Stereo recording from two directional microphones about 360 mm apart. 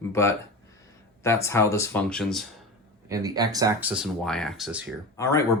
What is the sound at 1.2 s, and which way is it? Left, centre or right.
Speech, centre.